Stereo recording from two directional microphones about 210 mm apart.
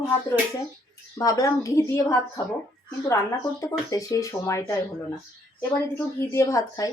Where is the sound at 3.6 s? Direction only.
15° left (ahead or behind).